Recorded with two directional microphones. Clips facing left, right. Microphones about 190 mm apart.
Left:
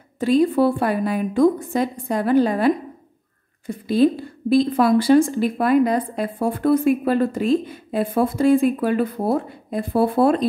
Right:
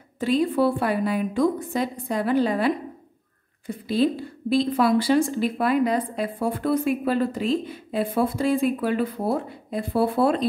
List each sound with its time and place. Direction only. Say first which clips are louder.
0.2 s a woman's voice: left 4 dB; 45° left (ahead or behind)